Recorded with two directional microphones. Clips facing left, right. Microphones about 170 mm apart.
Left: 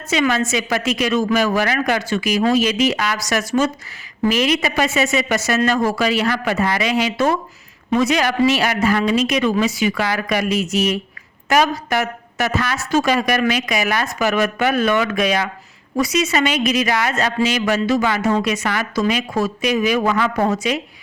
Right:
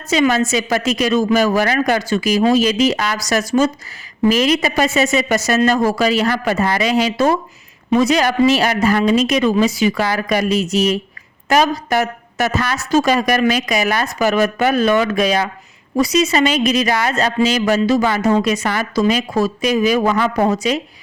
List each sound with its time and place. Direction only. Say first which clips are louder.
0.1 s a woman's voice: right 3 dB; 40° right (ahead or behind)